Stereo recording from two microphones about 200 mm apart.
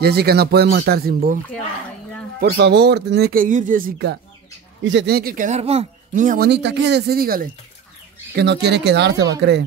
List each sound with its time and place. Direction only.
0.0 s speech: 55° right (ahead or behind)
2.4 s speech: 55° right (ahead or behind)
4.8 s speech: 60° right (ahead or behind)